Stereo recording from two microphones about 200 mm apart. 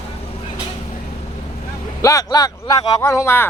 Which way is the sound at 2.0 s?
15° left (ahead or behind).